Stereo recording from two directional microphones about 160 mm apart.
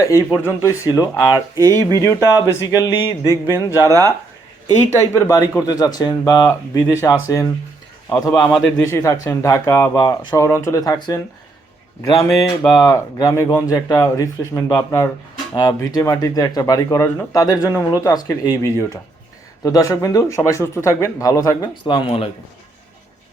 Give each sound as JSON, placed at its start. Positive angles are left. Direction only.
{"t": 0.0, "sound": "a man's voice", "side_deg": 20}
{"t": 5.1, "sound": "a man's voice", "side_deg": 20}
{"t": 21.8, "sound": "speech", "side_deg": 30}